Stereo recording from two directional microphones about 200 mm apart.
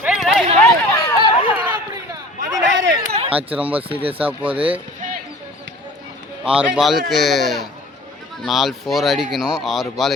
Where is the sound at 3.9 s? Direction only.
30° right (ahead or behind).